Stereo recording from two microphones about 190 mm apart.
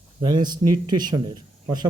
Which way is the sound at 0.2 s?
20° right (ahead or behind).